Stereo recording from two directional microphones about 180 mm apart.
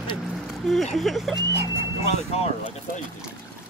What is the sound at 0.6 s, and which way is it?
Speech, centre (ahead or behind).